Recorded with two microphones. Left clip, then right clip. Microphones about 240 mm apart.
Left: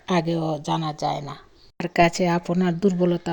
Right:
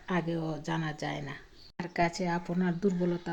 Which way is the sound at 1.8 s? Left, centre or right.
Left.